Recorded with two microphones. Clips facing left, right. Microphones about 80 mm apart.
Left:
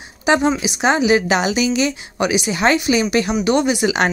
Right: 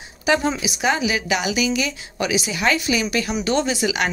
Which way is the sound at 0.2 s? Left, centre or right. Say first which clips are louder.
Left 4 dB; left.